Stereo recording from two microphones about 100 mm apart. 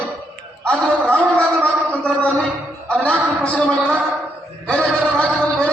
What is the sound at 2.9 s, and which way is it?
Speech, 10° left (ahead or behind).